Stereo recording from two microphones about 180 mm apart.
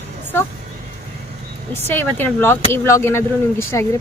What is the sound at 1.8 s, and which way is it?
Speech, 10° left (ahead or behind).